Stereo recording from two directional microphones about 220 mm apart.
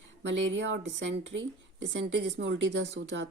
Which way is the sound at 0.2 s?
55° right (ahead or behind).